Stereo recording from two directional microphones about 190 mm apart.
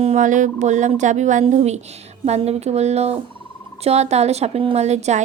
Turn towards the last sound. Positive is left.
turn(degrees=-35)  # may be behind; listen again after turning